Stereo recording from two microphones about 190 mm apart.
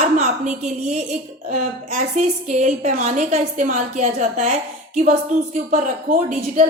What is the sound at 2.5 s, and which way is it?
A woman's voice, 40° right (ahead or behind).